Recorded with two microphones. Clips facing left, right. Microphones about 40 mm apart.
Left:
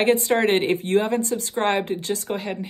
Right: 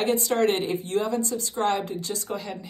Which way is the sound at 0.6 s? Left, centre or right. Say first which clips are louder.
Left 5 dB; left.